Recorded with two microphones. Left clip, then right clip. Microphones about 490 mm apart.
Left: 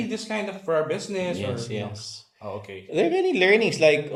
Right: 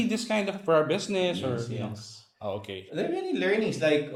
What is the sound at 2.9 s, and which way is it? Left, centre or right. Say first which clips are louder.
Speech: left 9 dB; left.